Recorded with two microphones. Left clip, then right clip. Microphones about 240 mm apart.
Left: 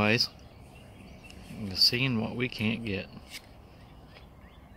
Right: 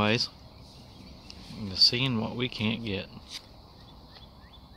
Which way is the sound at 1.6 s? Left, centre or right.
Centre.